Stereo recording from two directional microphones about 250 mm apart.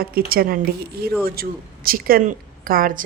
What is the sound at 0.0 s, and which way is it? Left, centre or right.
A woman's voice, right.